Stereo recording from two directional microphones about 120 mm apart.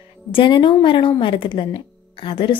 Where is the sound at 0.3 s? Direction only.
45° left (ahead or behind).